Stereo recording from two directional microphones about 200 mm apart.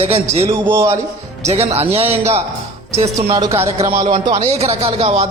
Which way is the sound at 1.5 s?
30° right (ahead or behind).